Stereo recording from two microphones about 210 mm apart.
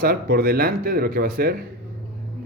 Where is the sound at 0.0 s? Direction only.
45° right (ahead or behind).